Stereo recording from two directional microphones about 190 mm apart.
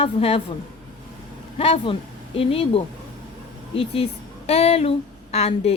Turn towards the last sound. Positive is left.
turn(degrees=30)  # may be behind; listen again after turning